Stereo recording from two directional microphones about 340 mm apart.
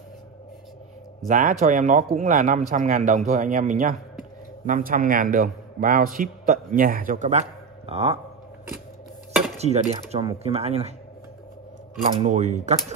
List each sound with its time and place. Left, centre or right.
1.2 s a man's voice: right
9.6 s speech: centre
12.2 s a man's voice: centre